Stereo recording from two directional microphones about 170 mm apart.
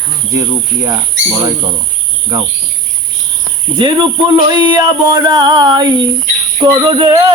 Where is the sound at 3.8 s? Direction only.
30° right (ahead or behind).